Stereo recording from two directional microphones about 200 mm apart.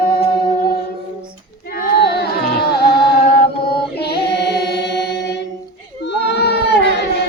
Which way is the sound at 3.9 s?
55° left (ahead or behind).